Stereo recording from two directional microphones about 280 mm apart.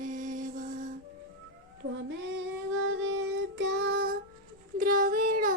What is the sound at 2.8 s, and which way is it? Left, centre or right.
Child singing, right.